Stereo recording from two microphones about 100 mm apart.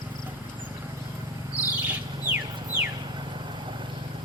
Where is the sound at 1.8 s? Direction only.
20° right (ahead or behind).